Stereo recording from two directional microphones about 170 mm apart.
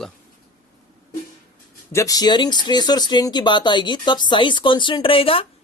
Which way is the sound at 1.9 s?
20° left (ahead or behind).